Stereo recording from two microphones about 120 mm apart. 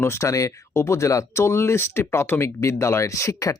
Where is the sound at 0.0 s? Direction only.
25° left (ahead or behind).